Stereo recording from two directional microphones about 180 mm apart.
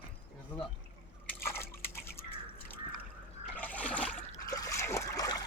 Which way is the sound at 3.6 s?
10° left (ahead or behind).